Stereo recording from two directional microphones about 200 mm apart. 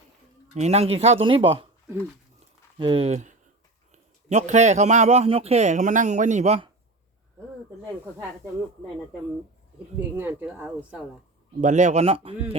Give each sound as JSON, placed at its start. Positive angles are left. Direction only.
{"t": 0.5, "sound": "a man's voice", "side_deg": -35}
{"t": 2.7, "sound": "a man's voice", "side_deg": -25}
{"t": 10.0, "sound": "speech", "side_deg": -10}
{"t": 11.6, "sound": "a man's voice", "side_deg": -35}